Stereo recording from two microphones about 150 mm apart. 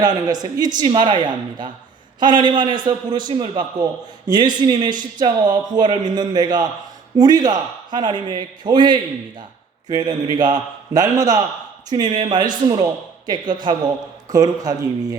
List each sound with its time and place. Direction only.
0.0 s a man's voice: 25° right (ahead or behind)